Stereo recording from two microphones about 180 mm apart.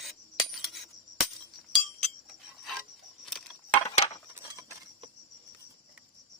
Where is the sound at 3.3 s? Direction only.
Centre (ahead or behind).